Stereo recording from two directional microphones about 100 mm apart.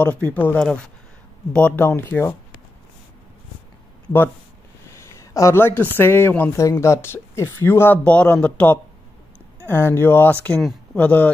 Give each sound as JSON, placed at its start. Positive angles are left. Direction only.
{"t": 0.0, "sound": "speech", "side_deg": 15}
{"t": 1.9, "sound": "speech", "side_deg": 25}
{"t": 5.0, "sound": "speech", "side_deg": 30}